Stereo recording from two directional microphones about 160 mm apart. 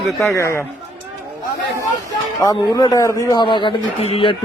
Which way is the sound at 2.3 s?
20° left (ahead or behind).